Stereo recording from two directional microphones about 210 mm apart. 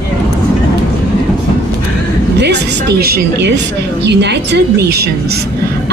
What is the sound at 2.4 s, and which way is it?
A woman's voice, 55° right (ahead or behind).